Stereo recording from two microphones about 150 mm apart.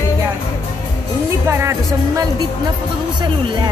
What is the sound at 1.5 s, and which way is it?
Speech, 20° right (ahead or behind).